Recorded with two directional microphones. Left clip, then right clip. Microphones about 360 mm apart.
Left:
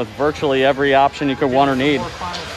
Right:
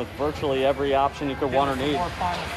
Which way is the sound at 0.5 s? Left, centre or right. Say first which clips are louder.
Left 7 dB; left.